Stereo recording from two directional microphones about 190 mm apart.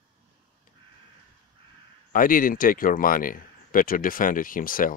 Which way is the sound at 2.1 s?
45° left (ahead or behind).